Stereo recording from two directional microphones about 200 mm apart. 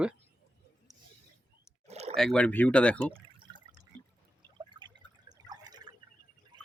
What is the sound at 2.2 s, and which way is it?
Speech, 5° left (ahead or behind).